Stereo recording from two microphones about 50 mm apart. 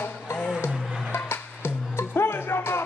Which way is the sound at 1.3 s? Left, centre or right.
Left.